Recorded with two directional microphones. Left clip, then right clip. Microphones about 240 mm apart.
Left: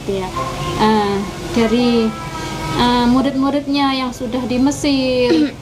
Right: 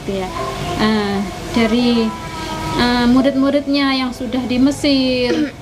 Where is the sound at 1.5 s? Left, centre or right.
Right.